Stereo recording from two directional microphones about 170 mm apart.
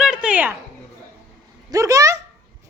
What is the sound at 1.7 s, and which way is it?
Speech, 20° right (ahead or behind).